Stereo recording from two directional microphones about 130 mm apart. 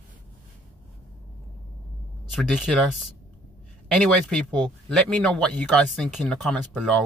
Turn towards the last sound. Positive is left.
turn(degrees=5)  # may be behind; listen again after turning